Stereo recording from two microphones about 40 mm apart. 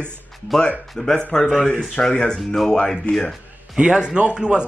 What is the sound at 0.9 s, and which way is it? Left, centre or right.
Speech, centre.